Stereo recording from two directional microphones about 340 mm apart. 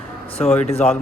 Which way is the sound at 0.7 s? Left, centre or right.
Centre.